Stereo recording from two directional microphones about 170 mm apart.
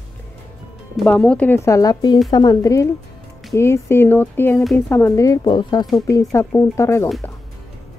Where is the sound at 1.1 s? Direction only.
5° left (ahead or behind); by 5.8 s 25° left (ahead or behind).